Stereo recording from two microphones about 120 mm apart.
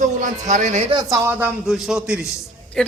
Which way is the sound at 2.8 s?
5° left (ahead or behind).